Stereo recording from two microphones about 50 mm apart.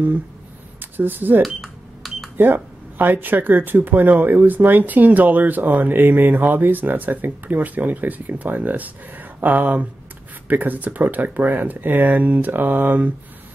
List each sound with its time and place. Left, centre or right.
0.7 s speech: right
1.4 s cash register: centre
2.3 s speech: right